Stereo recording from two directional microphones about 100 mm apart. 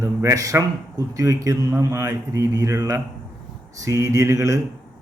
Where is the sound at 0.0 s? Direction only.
30° right (ahead or behind).